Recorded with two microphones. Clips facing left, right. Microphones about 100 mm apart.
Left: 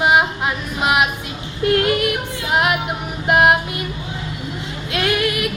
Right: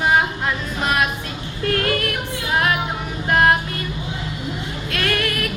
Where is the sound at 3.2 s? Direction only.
20° left (ahead or behind).